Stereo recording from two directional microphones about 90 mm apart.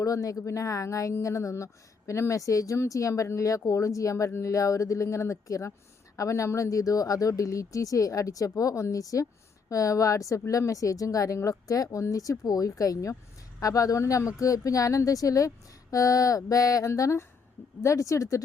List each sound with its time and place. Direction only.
0.0 s speech: 40° left (ahead or behind)